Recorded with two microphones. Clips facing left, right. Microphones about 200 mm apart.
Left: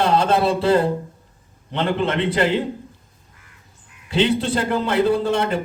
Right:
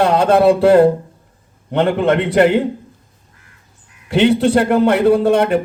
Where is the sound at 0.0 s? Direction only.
60° right (ahead or behind).